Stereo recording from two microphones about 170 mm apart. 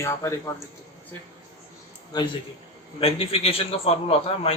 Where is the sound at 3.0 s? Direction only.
35° left (ahead or behind).